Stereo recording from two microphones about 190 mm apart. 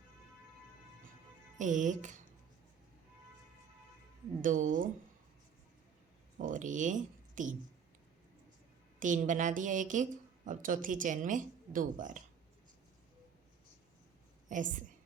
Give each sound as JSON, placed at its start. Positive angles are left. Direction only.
{"t": 1.5, "sound": "speech", "side_deg": -40}
{"t": 4.4, "sound": "a woman's voice", "side_deg": -45}
{"t": 6.4, "sound": "speech", "side_deg": -40}
{"t": 9.0, "sound": "a woman's voice", "side_deg": -45}
{"t": 14.5, "sound": "a woman's voice", "side_deg": -45}